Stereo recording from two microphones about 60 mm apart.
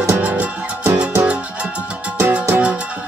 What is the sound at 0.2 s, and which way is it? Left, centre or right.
Music, right.